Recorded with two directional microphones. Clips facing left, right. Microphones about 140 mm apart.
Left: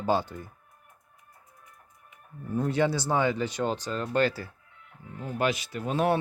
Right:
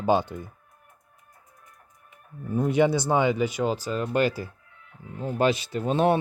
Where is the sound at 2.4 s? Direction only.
15° right (ahead or behind).